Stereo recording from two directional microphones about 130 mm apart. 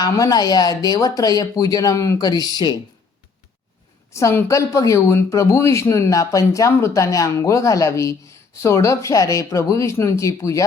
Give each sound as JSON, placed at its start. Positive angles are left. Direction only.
{"t": 0.0, "sound": "speech", "side_deg": 30}
{"t": 4.1, "sound": "speech", "side_deg": 20}